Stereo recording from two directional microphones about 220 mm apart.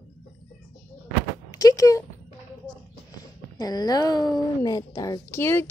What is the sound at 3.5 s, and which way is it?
A woman's voice, 15° left (ahead or behind).